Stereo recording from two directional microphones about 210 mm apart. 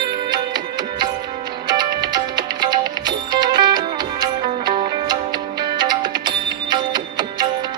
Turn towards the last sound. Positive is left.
turn(degrees=-20)  # may be behind; listen again after turning